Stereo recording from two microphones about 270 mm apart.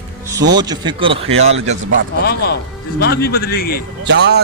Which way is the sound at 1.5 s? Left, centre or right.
Right.